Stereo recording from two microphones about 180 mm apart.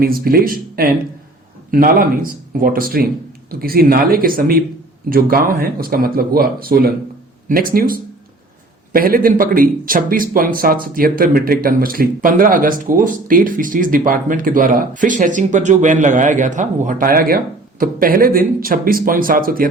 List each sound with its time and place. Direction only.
0.0 s speech: 55° right (ahead or behind)